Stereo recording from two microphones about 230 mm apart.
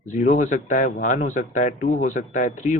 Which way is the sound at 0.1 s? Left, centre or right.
Left.